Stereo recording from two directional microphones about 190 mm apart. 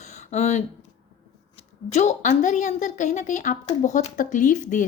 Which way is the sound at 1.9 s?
35° left (ahead or behind).